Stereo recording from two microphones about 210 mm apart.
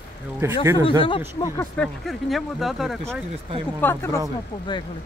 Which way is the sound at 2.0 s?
Centre (ahead or behind).